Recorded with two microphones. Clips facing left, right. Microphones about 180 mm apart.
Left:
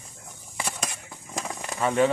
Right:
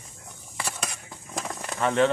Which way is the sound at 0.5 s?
15° left (ahead or behind).